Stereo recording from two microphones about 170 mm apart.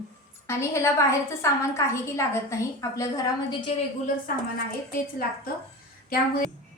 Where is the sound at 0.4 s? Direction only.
15° left (ahead or behind).